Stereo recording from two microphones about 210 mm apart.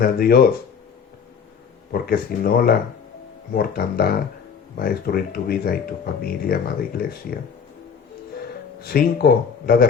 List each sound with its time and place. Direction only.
0.0 s speech: 45° left (ahead or behind)
1.9 s speech: 45° left (ahead or behind)
8.8 s speech: 45° left (ahead or behind)